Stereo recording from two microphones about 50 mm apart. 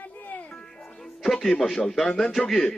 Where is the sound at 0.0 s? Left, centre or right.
Left.